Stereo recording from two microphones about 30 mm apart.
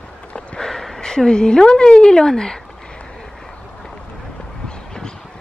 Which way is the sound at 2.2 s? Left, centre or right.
Centre.